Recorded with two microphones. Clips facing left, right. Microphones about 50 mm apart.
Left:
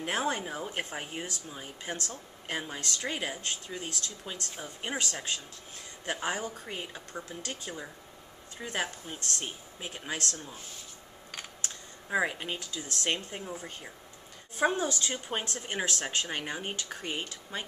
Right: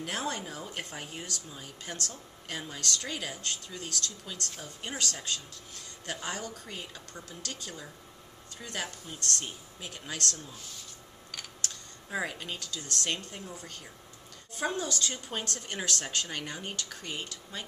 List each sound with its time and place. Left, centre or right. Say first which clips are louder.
0.0 s speech: left 4 dB; left
11.3 s camera: even; left
13.3 s speech: left 4 dB; left